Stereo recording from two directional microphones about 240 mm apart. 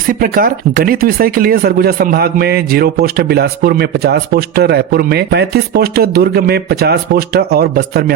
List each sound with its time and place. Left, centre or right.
0.1 s speech: right